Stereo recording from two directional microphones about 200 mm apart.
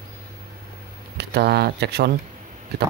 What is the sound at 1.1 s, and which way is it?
Speech, 55° right (ahead or behind).